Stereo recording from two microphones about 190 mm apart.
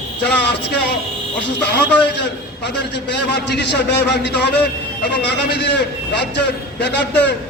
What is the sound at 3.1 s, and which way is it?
A man's voice, 65° left (ahead or behind).